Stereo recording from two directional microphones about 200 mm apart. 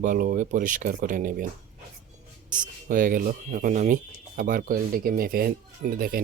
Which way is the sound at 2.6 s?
40° right (ahead or behind).